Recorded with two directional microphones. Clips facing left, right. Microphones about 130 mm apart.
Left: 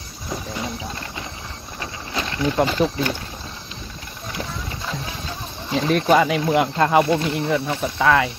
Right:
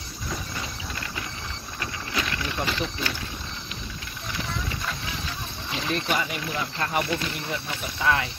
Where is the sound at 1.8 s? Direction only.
25° left (ahead or behind).